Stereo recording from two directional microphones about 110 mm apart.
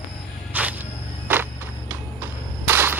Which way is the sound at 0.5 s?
15° right (ahead or behind).